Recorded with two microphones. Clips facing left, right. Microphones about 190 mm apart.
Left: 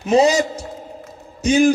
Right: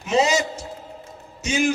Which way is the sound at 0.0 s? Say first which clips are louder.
Left 5 dB; 35° left (ahead or behind).